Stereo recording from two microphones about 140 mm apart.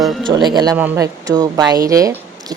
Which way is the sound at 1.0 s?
25° right (ahead or behind).